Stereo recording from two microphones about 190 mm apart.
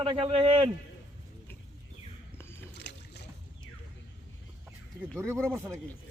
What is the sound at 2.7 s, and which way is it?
Boat, 60° left (ahead or behind).